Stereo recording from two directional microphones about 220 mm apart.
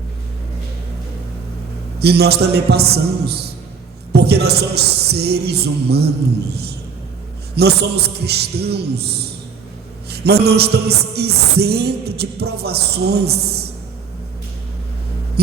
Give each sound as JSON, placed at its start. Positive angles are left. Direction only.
{"t": 2.0, "sound": "music", "side_deg": -45}